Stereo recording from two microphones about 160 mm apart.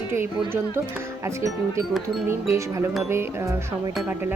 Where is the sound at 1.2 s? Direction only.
20° right (ahead or behind).